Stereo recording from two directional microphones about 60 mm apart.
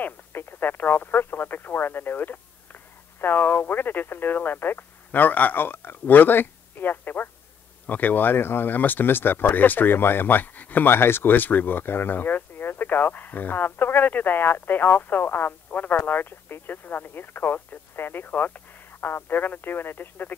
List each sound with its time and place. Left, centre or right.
0.0 s speech: left